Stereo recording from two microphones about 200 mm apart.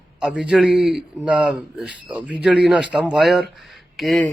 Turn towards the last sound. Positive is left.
turn(degrees=0)  # may be behind; listen again after turning